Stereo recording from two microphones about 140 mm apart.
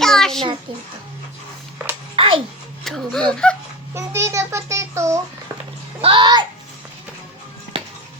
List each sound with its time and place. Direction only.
0.0 s a sound: 5° left (ahead or behind)
2.1 s music: 40° right (ahead or behind)
2.8 s a sound: centre (ahead or behind)
3.9 s babbling: 20° right (ahead or behind)
6.0 s bathtub: 35° right (ahead or behind)
7.7 s music: 40° right (ahead or behind)